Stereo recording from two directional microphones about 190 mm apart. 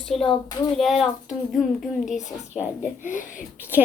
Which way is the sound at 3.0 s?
45° left (ahead or behind).